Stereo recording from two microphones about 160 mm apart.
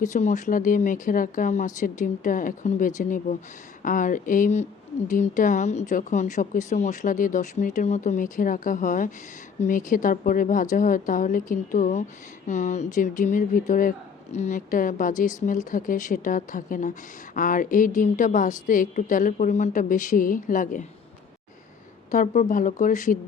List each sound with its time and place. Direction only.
0.0 s a woman's voice: 50° left (ahead or behind)
22.1 s a woman's voice: 50° left (ahead or behind)